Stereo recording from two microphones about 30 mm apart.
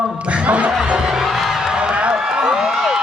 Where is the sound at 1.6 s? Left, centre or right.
Centre.